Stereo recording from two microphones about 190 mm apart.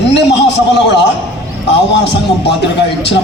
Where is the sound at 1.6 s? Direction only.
65° left (ahead or behind).